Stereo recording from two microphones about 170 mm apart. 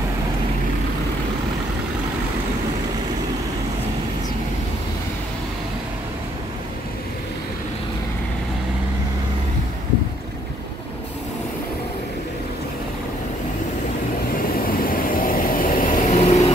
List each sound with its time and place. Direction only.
14.4 s vehicle: 60° left (ahead or behind); by 16.5 s 40° left (ahead or behind)